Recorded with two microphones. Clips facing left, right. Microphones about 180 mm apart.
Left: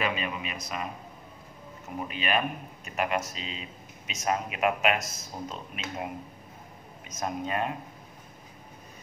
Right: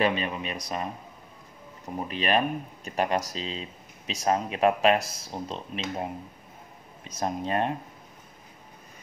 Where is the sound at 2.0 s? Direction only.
35° right (ahead or behind).